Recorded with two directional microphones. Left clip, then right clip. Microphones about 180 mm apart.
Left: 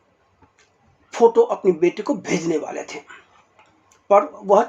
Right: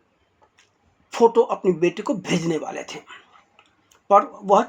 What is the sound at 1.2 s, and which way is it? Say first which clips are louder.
Speech: left 2 dB; 35° right (ahead or behind).